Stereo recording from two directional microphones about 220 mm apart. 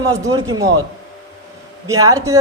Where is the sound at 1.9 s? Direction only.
15° right (ahead or behind).